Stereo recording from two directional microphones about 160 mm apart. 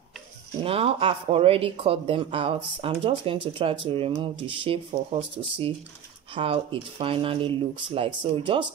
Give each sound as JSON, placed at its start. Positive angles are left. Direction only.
{"t": 0.7, "sound": "speech", "side_deg": -35}